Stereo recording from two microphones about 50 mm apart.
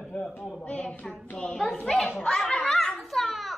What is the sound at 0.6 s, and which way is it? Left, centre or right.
Speech, left.